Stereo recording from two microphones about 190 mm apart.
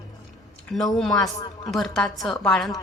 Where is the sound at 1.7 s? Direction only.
Centre (ahead or behind).